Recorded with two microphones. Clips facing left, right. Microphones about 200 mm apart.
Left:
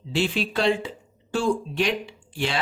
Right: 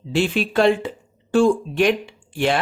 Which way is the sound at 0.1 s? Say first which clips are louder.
Right 4 dB; 50° right (ahead or behind).